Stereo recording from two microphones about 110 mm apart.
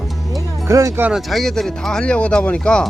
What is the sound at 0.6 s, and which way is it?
Speech, 30° right (ahead or behind).